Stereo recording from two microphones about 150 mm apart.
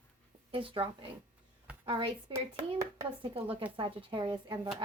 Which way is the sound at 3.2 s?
40° right (ahead or behind).